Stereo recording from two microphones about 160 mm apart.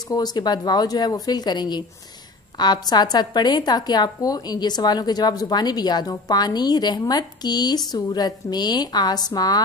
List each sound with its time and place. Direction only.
0.1 s a woman's voice: 25° left (ahead or behind)